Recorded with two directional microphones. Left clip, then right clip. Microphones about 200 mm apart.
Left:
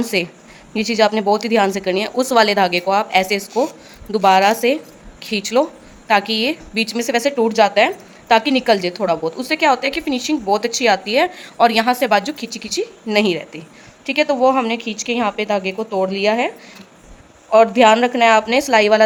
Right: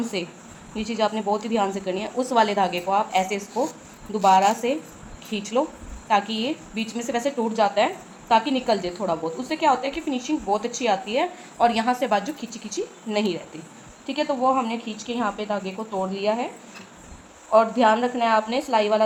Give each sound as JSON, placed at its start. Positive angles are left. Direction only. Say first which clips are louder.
{"t": 0.0, "sound": "a woman's voice", "louder": "left 9 dB", "side_deg": 50}
{"t": 17.5, "sound": "a woman's voice", "louder": "left 7 dB", "side_deg": 55}